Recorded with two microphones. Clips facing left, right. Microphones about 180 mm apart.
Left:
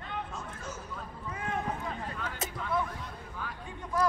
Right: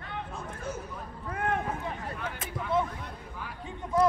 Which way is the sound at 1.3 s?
60° right (ahead or behind).